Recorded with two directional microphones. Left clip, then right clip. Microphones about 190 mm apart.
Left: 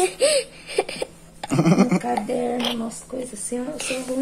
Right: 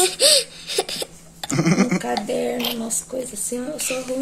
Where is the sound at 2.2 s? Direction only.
25° left (ahead or behind).